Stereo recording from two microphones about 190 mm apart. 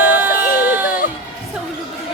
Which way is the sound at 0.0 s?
10° right (ahead or behind).